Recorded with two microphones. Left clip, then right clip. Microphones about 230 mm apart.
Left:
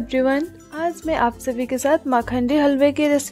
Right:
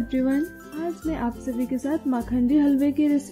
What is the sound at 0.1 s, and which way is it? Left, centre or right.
A woman's voice, left.